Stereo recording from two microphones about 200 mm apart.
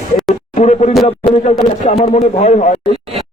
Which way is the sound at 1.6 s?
30° left (ahead or behind).